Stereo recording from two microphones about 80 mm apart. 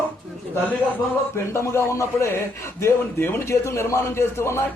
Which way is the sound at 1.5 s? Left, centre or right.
Left.